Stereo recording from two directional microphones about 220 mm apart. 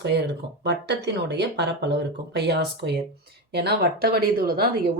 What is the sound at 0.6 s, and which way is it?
Speech, 50° right (ahead or behind).